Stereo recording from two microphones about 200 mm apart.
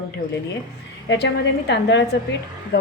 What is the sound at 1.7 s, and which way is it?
A woman's voice, 60° left (ahead or behind).